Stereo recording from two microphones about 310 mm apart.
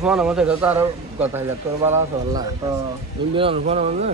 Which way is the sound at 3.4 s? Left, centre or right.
Centre.